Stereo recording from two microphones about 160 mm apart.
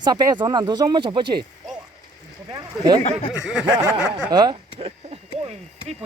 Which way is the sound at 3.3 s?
5° right (ahead or behind).